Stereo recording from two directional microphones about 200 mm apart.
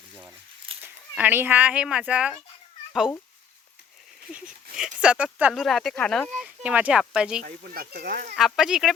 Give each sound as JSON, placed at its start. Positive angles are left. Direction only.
{"t": 0.7, "sound": "a sound", "side_deg": -30}
{"t": 1.1, "sound": "speech", "side_deg": -10}
{"t": 4.3, "sound": "speech", "side_deg": -5}
{"t": 6.4, "sound": "speech", "side_deg": -5}
{"t": 7.4, "sound": "speech", "side_deg": -50}
{"t": 8.4, "sound": "speech", "side_deg": 0}